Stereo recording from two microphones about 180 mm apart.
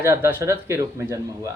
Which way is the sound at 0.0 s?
15° right (ahead or behind).